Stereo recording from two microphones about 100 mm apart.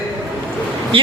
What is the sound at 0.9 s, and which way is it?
Speech, 60° right (ahead or behind).